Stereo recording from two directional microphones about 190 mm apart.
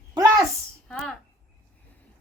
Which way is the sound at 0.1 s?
20° right (ahead or behind).